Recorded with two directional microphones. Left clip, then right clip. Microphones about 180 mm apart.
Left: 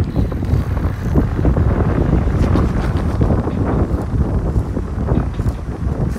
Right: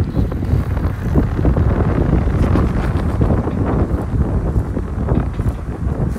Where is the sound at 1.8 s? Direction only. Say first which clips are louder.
Even; 5° left (ahead or behind).